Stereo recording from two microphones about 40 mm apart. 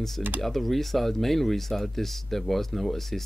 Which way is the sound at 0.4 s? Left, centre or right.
Centre.